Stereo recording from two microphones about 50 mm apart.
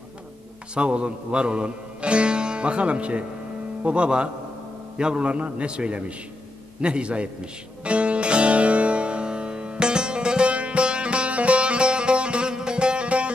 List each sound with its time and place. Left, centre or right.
0.7 s a man's voice: right
7.8 s music: right